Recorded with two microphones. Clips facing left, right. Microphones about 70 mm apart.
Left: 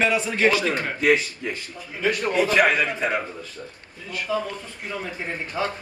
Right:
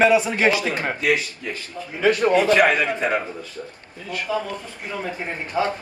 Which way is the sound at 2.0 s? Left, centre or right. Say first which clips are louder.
Right 6 dB; right.